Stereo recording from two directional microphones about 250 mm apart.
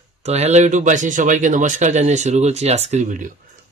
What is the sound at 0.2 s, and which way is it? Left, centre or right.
A man's voice, right.